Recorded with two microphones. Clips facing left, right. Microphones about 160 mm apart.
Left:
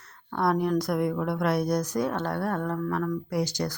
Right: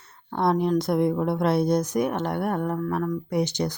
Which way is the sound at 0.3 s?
20° right (ahead or behind).